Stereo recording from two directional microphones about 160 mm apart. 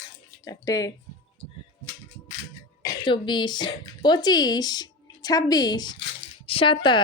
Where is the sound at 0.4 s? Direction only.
25° left (ahead or behind).